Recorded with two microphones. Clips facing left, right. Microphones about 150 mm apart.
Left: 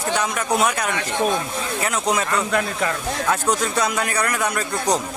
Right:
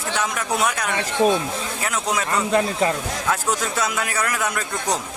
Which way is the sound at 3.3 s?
5° right (ahead or behind).